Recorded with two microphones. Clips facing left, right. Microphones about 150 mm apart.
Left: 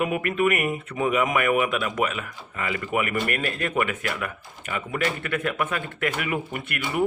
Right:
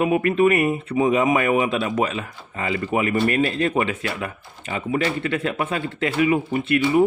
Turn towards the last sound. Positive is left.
turn(degrees=-25)  # may be behind; listen again after turning